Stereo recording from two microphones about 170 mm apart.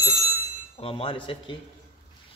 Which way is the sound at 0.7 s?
35° left (ahead or behind).